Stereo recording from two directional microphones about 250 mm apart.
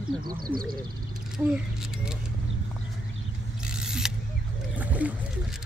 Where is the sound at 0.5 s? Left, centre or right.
Centre.